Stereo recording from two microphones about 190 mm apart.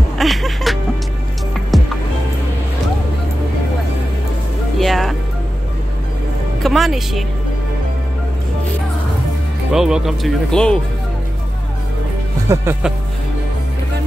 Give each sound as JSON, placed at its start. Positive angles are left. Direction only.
{"t": 0.2, "sound": "music", "side_deg": 0}
{"t": 4.7, "sound": "music", "side_deg": 0}
{"t": 6.6, "sound": "speech", "side_deg": 0}
{"t": 9.7, "sound": "speech", "side_deg": -5}
{"t": 12.5, "sound": "speech", "side_deg": -15}